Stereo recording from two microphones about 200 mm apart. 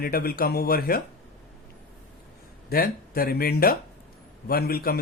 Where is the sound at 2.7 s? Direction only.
50° left (ahead or behind).